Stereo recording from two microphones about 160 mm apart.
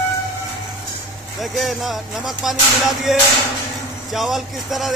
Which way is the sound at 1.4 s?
Centre (ahead or behind).